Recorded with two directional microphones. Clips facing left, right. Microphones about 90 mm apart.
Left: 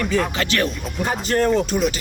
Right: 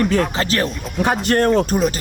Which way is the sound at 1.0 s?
65° right (ahead or behind).